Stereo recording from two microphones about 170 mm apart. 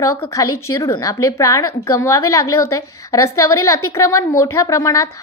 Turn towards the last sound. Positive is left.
turn(degrees=20)  # may be behind; listen again after turning